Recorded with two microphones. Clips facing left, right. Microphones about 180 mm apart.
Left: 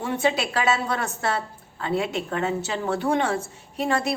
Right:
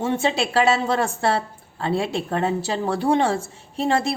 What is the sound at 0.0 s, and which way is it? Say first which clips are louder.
A woman's voice: right 2 dB; 25° right (ahead or behind).